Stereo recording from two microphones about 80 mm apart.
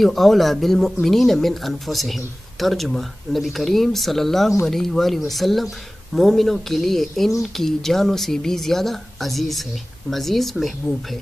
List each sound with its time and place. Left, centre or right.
0.0 s speech: centre